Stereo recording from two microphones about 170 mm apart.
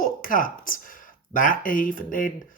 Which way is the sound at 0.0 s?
55° left (ahead or behind).